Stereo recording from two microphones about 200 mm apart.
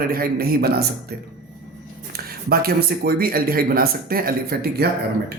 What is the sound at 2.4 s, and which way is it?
Speech, 50° right (ahead or behind).